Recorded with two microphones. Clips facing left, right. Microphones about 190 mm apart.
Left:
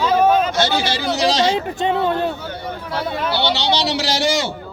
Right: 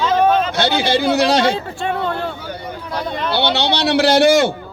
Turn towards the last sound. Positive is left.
turn(degrees=-55)  # may be behind; listen again after turning